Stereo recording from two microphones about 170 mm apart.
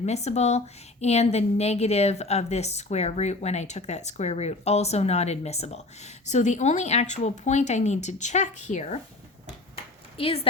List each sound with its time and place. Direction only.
0.0 s a woman's voice: 40° left (ahead or behind)
10.2 s a woman's voice: 35° left (ahead or behind)